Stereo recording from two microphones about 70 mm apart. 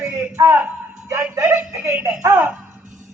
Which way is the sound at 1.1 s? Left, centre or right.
Right.